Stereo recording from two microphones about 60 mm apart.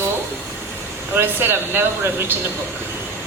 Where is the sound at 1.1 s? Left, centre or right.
Right.